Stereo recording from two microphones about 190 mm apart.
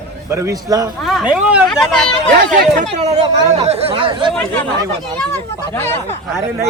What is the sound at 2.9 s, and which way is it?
Speech, 35° right (ahead or behind).